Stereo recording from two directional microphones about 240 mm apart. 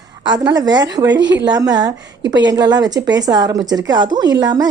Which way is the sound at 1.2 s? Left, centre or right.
Right.